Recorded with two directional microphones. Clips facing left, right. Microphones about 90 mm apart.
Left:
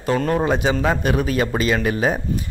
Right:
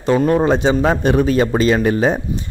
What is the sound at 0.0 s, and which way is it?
Speech, 20° right (ahead or behind).